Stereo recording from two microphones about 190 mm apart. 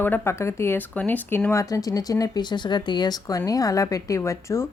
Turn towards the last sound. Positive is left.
turn(degrees=15)  # may be behind; listen again after turning